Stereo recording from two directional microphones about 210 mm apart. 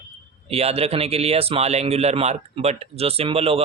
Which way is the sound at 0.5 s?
30° right (ahead or behind).